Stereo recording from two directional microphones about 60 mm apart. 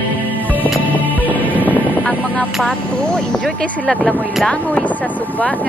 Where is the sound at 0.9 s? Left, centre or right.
Left.